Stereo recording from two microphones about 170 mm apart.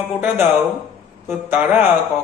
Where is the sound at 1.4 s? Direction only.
10° right (ahead or behind).